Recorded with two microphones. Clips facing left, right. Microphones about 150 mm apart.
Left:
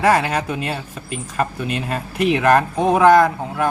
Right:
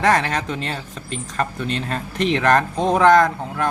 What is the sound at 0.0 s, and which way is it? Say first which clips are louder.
A man's voice: left 2 dB; 5° left (ahead or behind).